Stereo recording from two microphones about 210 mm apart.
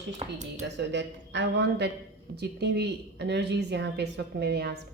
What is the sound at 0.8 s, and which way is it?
A man's voice, 55° right (ahead or behind).